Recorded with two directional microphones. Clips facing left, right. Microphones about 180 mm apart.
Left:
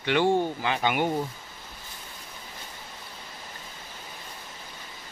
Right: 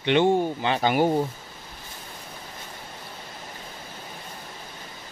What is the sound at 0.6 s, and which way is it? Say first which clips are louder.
Speech: right 4 dB; 35° right (ahead or behind).